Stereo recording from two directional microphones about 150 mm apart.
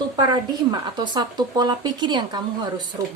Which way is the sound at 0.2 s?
25° right (ahead or behind).